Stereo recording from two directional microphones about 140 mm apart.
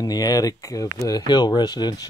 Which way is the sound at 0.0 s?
25° left (ahead or behind).